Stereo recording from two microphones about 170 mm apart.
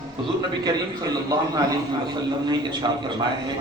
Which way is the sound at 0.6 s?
20° right (ahead or behind).